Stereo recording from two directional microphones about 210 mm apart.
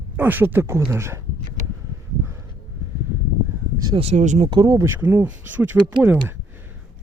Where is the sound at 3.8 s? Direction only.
25° right (ahead or behind); by 6.0 s 10° right (ahead or behind).